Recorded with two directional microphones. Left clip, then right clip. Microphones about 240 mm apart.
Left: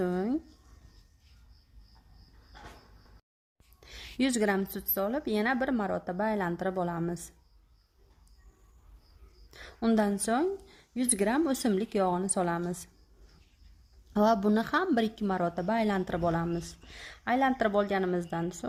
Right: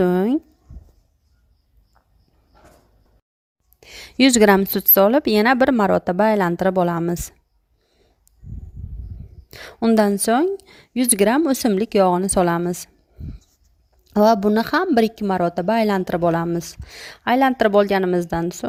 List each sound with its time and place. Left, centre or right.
0.0 s a sound: right
3.8 s speech: right
9.5 s speech: right
14.1 s speech: right